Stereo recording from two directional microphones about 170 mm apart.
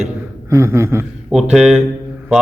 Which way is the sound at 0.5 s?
15° right (ahead or behind).